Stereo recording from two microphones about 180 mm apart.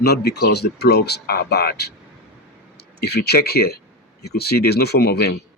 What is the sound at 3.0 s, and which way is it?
A man's voice, 65° left (ahead or behind).